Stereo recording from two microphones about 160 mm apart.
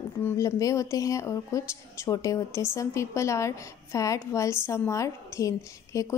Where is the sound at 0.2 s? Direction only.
20° left (ahead or behind).